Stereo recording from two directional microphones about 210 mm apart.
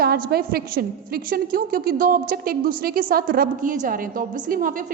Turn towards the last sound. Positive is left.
turn(degrees=-40)  # may be behind; listen again after turning